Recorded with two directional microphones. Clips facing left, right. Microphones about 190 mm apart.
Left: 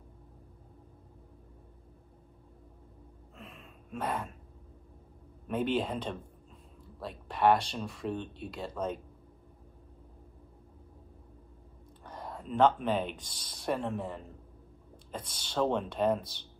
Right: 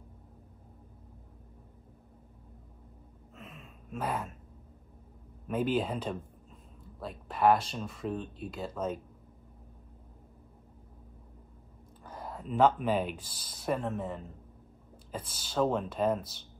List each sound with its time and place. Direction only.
3.3 s a sound: 5° right (ahead or behind)
5.5 s speech: 5° right (ahead or behind)
12.0 s speech: 5° right (ahead or behind)